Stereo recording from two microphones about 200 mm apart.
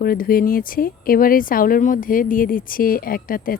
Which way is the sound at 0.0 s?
45° left (ahead or behind).